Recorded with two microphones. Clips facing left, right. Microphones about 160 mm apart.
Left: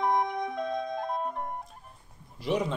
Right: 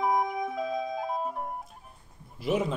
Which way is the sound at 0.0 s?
5° right (ahead or behind).